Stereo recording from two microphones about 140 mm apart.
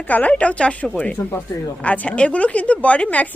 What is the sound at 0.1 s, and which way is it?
A woman's voice, 10° left (ahead or behind).